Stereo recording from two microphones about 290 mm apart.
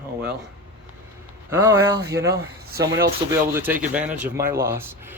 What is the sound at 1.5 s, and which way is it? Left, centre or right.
Speech, centre.